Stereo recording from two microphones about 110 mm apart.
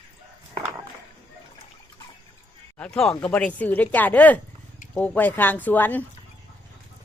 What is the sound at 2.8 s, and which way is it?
Speech, 10° left (ahead or behind).